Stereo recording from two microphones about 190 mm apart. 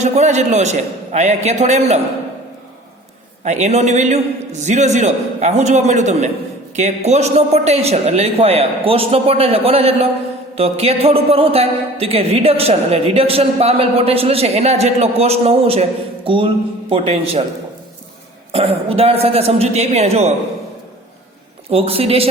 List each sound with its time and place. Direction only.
0.0 s a man's voice: 35° right (ahead or behind)
3.4 s a man's voice: 35° right (ahead or behind)
18.5 s a man's voice: 30° right (ahead or behind)
21.7 s a man's voice: 30° right (ahead or behind)